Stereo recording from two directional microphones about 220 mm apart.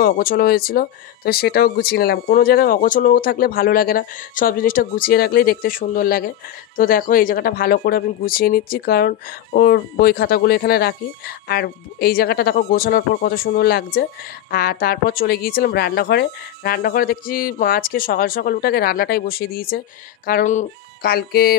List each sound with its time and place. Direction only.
0.0 s speech: 40° left (ahead or behind)